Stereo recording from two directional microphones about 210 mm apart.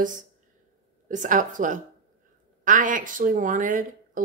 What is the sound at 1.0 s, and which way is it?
Speech, 35° right (ahead or behind).